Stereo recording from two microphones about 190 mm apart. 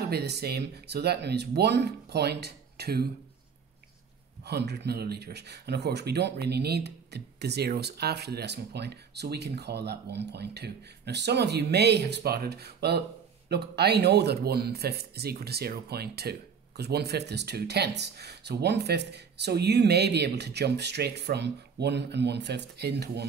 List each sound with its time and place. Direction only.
0.1 s speech: 60° right (ahead or behind)
4.5 s speech: 60° right (ahead or behind)